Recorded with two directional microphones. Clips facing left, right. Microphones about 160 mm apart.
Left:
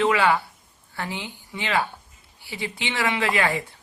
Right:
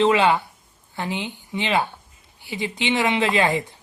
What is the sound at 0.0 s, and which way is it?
Speech, 20° right (ahead or behind).